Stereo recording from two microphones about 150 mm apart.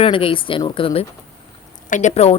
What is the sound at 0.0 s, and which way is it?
A woman's voice, 35° left (ahead or behind).